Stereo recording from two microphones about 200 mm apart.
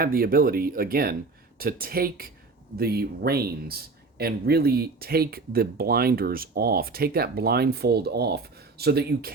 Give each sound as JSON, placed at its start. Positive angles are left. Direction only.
{"t": 0.0, "sound": "speech", "side_deg": -45}